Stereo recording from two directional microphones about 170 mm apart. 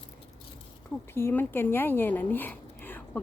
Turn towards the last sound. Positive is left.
turn(degrees=10)  # may be behind; listen again after turning